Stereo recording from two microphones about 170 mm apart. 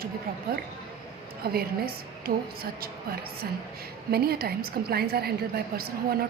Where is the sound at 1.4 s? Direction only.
65° right (ahead or behind).